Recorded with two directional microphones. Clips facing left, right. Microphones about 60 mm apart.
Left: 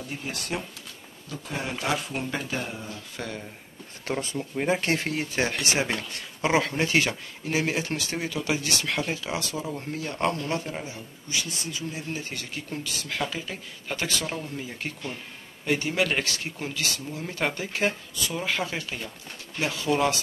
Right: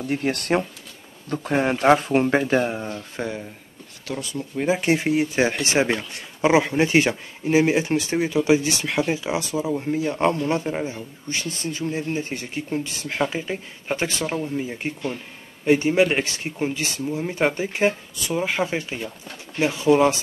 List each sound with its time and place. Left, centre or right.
0.1 s speech: right
3.2 s speech: right
4.0 s speech: left
4.6 s speech: centre; by 11.0 s right
11.2 s speech: right